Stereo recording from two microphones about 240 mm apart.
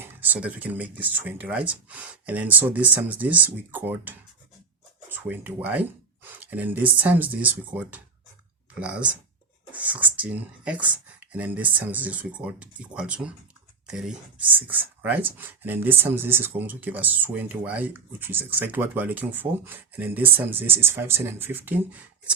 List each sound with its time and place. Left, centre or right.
0.0 s speech: centre